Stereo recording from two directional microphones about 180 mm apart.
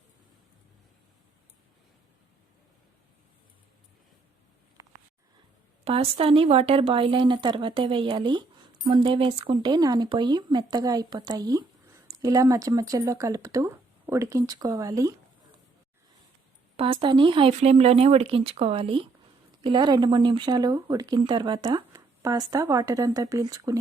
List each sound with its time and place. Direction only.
5.8 s speech: 35° right (ahead or behind)
16.7 s speech: 30° right (ahead or behind)